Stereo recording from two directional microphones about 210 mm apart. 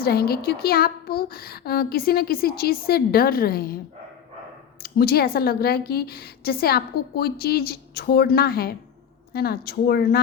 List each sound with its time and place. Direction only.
0.0 s speech: 45° left (ahead or behind)
4.8 s speech: 45° left (ahead or behind)